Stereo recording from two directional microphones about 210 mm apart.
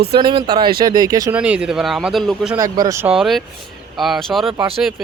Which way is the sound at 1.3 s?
5° right (ahead or behind).